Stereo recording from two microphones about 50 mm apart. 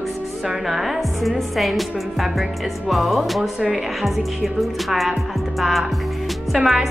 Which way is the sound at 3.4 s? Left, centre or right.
Centre.